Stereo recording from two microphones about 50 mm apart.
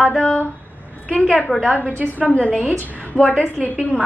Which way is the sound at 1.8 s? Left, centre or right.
Right.